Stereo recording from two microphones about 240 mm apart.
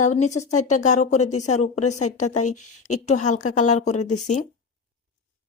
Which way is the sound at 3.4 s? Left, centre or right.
Left.